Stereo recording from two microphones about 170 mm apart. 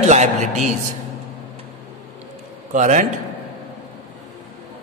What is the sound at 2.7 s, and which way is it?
Speech, 45° right (ahead or behind).